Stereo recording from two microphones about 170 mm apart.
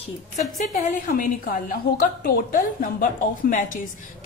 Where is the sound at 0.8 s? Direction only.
50° left (ahead or behind).